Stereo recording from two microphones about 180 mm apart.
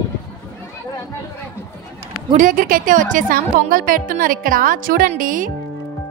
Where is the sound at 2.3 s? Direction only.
45° right (ahead or behind).